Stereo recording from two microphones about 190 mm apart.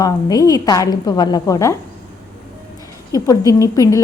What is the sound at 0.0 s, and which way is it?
A woman's voice, 20° left (ahead or behind).